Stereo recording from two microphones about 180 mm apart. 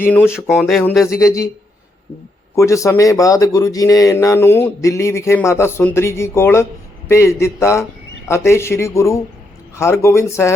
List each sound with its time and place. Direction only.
0.0 s speech: 10° left (ahead or behind)
1.0 s speech: 20° left (ahead or behind)
2.6 s speech: 15° left (ahead or behind)